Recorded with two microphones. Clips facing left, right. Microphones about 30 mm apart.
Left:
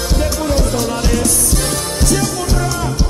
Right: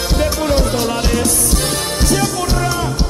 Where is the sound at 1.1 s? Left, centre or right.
Centre.